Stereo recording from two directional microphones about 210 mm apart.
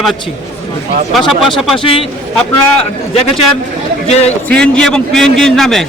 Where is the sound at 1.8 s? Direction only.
25° left (ahead or behind).